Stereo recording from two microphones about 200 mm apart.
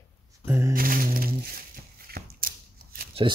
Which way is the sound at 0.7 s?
45° right (ahead or behind).